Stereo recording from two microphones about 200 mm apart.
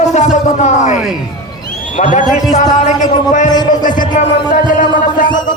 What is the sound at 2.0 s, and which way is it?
Speech, 40° left (ahead or behind).